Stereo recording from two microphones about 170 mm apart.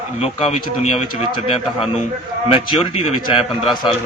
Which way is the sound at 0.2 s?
35° left (ahead or behind).